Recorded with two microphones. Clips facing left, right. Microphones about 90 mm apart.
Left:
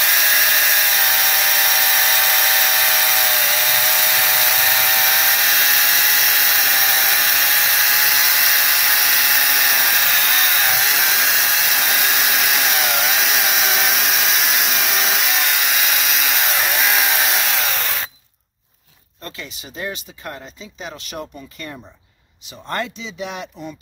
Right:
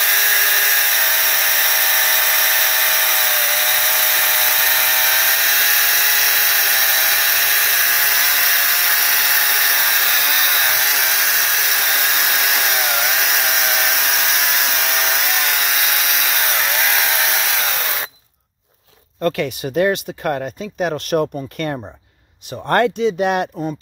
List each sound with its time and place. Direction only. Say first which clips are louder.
0.0 s hair dryer: even; centre (ahead or behind)
19.2 s speech: right 15 dB; 60° right (ahead or behind)